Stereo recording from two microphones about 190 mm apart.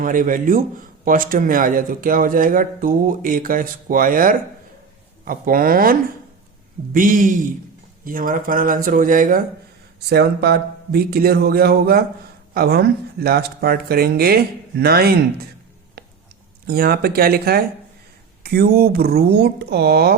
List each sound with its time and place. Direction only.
0.0 s speech: 45° right (ahead or behind)
10.1 s speech: 55° right (ahead or behind)
16.0 s a sound: 60° right (ahead or behind)
16.6 s speech: 55° right (ahead or behind)